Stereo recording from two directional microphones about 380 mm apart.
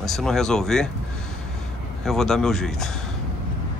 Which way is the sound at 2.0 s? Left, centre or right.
Centre.